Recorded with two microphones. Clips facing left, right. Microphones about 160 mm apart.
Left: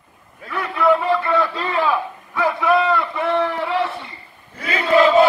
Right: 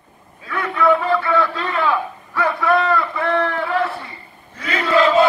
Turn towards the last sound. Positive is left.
turn(degrees=10)  # may be behind; listen again after turning